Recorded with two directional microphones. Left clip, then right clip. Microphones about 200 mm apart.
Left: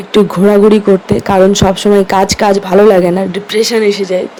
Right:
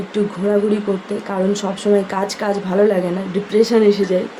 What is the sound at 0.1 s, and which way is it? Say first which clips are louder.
Speech: left 10 dB; 40° left (ahead or behind).